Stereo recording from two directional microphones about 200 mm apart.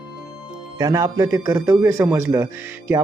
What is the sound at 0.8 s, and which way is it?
Speech, 20° right (ahead or behind).